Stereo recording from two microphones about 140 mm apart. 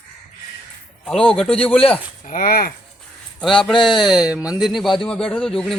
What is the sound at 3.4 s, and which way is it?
Speech, centre (ahead or behind).